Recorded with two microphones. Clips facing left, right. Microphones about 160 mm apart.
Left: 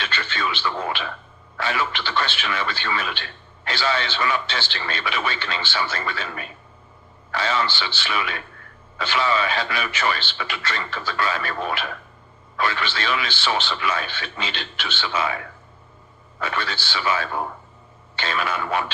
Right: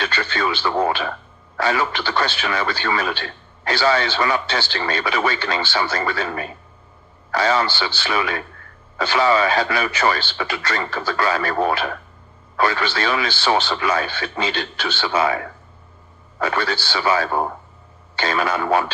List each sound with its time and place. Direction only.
0.0 s speech: 40° right (ahead or behind)
16.4 s speech: 40° right (ahead or behind)